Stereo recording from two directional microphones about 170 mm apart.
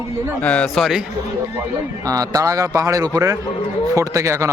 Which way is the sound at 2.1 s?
20° right (ahead or behind).